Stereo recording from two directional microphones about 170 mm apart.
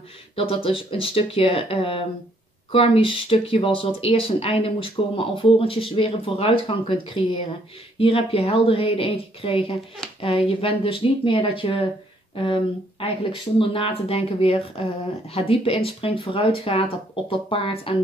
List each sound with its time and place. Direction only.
0.4 s speech: 30° left (ahead or behind)
10.0 s a sound: 5° left (ahead or behind)
10.6 s speech: 35° left (ahead or behind)
13.0 s speech: 30° left (ahead or behind)